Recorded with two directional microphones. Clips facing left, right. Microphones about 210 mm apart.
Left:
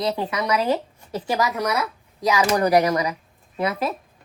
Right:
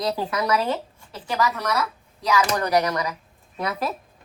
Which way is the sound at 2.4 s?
30° left (ahead or behind).